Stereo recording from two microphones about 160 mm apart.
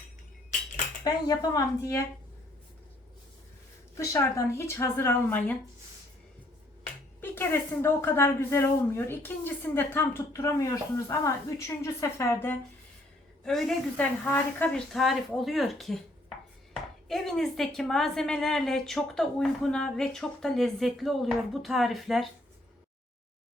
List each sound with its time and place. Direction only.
1.0 s speech: 25° left (ahead or behind)
3.9 s a woman's voice: 20° left (ahead or behind)
7.2 s a woman's voice: 15° left (ahead or behind)
13.4 s a woman's voice: 5° left (ahead or behind)
17.1 s a woman's voice: centre (ahead or behind)